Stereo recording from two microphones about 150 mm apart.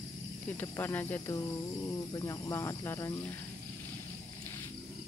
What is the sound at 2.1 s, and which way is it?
Speech, 25° left (ahead or behind).